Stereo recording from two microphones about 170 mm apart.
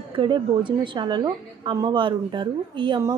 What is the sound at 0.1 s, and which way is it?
A woman's voice, 30° right (ahead or behind).